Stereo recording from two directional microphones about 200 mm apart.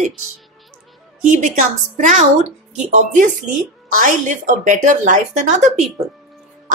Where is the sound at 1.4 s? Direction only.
35° right (ahead or behind).